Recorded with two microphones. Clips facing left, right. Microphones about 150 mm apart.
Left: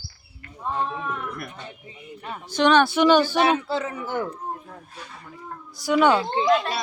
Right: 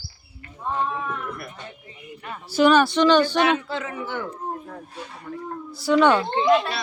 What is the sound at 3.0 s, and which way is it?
Speech, 10° left (ahead or behind).